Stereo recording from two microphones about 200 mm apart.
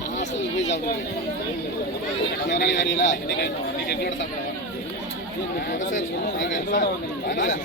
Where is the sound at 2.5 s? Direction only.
60° left (ahead or behind).